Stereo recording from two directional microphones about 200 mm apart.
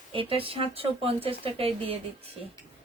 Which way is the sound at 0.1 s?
25° right (ahead or behind).